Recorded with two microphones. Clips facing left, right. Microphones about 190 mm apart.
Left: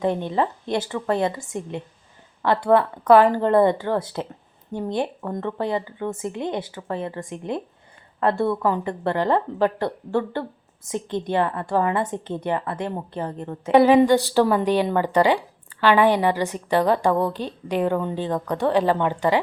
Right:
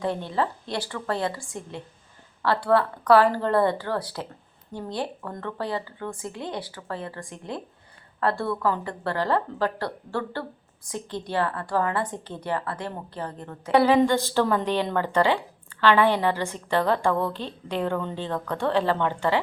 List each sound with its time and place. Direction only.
0.0 s a woman's voice: 20° left (ahead or behind)